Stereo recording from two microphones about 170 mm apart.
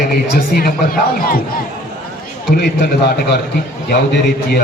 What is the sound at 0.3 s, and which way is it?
Speech, 60° left (ahead or behind).